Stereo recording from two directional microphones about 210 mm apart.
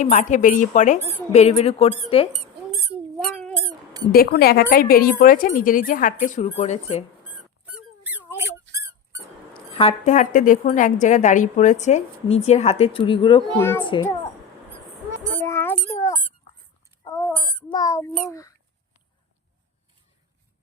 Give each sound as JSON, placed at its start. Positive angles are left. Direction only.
{"t": 0.0, "sound": "a woman's voice", "side_deg": 35}
{"t": 3.2, "sound": "cat", "side_deg": 5}
{"t": 4.0, "sound": "a woman's voice", "side_deg": 45}
{"t": 7.6, "sound": "squeak", "side_deg": -10}
{"t": 9.7, "sound": "a woman's voice", "side_deg": 30}
{"t": 13.6, "sound": "speech", "side_deg": 10}
{"t": 13.8, "sound": "speech", "side_deg": 20}
{"t": 15.2, "sound": "a sound", "side_deg": -35}
{"t": 15.4, "sound": "a sound", "side_deg": 10}
{"t": 17.0, "sound": "a sound", "side_deg": 15}
{"t": 18.2, "sound": "speech", "side_deg": 15}